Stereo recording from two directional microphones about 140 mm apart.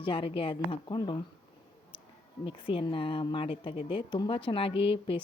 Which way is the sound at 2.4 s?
40° left (ahead or behind).